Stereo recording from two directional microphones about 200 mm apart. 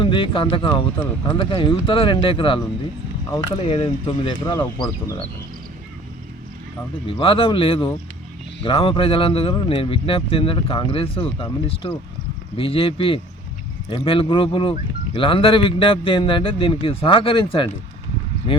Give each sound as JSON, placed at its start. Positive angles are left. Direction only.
{"t": 0.0, "sound": "speech", "side_deg": 25}
{"t": 7.2, "sound": "speech", "side_deg": 25}